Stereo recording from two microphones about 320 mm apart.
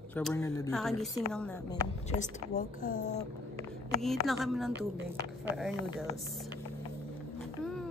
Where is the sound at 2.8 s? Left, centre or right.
Left.